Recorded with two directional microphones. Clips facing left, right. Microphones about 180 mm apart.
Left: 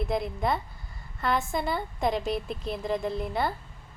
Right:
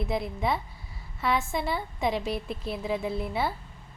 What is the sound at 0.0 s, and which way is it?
A woman's voice, centre (ahead or behind).